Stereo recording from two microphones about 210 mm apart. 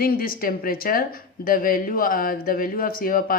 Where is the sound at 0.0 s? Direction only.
45° left (ahead or behind).